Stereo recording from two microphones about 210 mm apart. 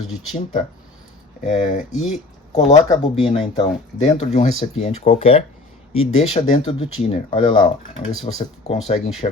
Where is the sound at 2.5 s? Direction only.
35° left (ahead or behind).